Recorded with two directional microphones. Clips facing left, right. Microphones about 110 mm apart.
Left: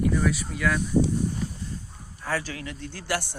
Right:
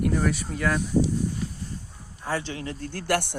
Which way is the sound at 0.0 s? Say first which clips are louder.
Even; 50° right (ahead or behind).